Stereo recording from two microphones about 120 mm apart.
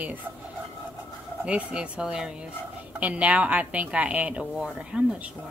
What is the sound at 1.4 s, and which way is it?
Speech, 10° right (ahead or behind).